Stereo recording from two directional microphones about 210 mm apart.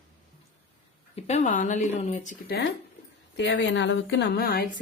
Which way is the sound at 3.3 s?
60° left (ahead or behind).